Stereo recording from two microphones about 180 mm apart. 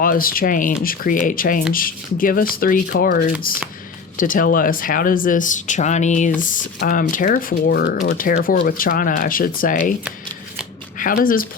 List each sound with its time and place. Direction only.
0.0 s speech: 50° left (ahead or behind)
10.9 s speech: 50° left (ahead or behind)